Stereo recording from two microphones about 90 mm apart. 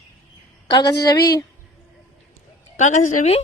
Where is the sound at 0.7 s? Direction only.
50° left (ahead or behind).